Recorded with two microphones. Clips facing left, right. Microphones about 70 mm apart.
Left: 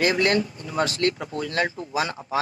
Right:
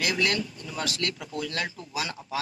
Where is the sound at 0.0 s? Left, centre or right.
Left.